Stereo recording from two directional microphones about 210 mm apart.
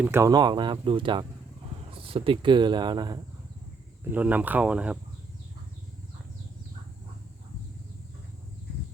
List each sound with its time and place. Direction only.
0.0 s speech: 10° right (ahead or behind)
4.1 s speech: 10° right (ahead or behind)